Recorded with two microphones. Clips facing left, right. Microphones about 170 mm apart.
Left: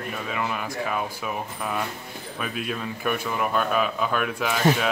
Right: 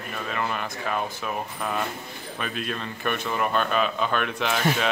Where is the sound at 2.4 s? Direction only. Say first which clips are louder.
Left 1 dB; 5° left (ahead or behind).